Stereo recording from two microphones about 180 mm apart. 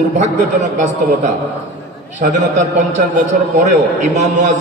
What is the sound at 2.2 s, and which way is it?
A man's voice, 40° right (ahead or behind).